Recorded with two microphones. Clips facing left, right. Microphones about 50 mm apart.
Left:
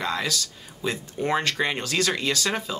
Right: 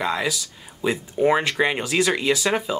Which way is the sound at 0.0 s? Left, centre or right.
Centre.